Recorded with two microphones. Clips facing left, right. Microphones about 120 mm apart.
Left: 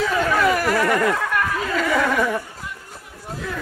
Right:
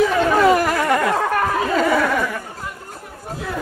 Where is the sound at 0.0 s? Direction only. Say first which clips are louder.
Right 4 dB; 30° right (ahead or behind).